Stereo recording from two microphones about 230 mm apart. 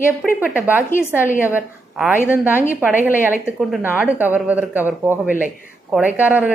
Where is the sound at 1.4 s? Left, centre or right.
Centre.